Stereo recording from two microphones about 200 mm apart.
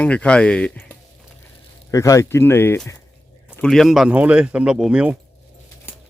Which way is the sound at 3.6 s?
Centre (ahead or behind).